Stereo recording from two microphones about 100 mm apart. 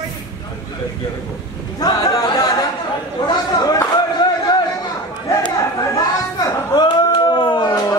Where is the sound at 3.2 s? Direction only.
40° left (ahead or behind).